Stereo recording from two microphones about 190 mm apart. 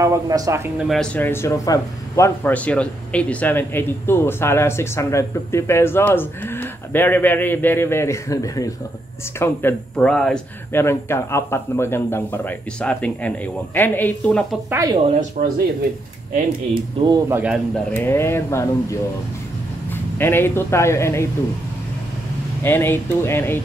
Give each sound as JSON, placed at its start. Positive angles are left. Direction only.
{"t": 0.0, "sound": "speech", "side_deg": -15}
{"t": 0.8, "sound": "a man's voice", "side_deg": 5}
{"t": 14.7, "sound": "speech", "side_deg": -15}
{"t": 15.1, "sound": "speech", "side_deg": -40}
{"t": 17.1, "sound": "speech", "side_deg": -10}
{"t": 17.7, "sound": "a man's voice", "side_deg": 10}
{"t": 22.6, "sound": "a man's voice", "side_deg": 10}